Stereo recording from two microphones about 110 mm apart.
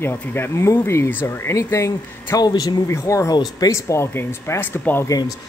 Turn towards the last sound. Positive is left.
turn(degrees=20)  # may be behind; listen again after turning